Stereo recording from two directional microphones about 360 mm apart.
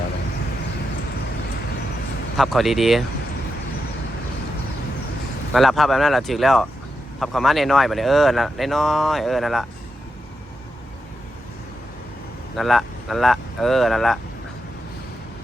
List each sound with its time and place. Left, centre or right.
2.4 s speech: centre
5.5 s speech: centre
12.5 s speech: centre